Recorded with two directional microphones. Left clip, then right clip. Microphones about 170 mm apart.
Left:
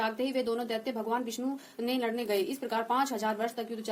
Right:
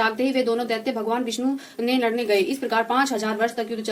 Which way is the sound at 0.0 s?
20° right (ahead or behind).